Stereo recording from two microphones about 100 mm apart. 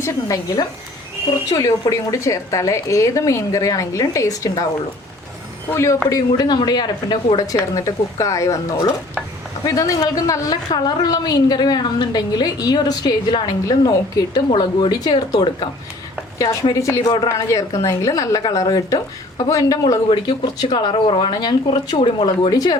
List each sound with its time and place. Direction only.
0.0 s a woman's voice: 30° left (ahead or behind)
5.7 s a woman's voice: 30° left (ahead or behind); by 15.7 s 50° left (ahead or behind)
16.8 s a woman's voice: 30° left (ahead or behind)
18.4 s a woman's voice: 45° left (ahead or behind)